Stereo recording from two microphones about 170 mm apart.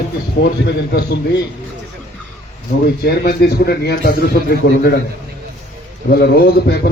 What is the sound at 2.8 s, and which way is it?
A man's voice, 70° left (ahead or behind).